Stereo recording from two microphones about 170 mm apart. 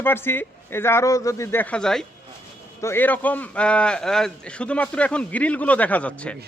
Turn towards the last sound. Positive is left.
turn(degrees=5)  # may be behind; listen again after turning